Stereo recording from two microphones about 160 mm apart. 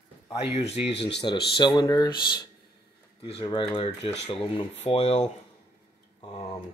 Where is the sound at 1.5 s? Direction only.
25° left (ahead or behind).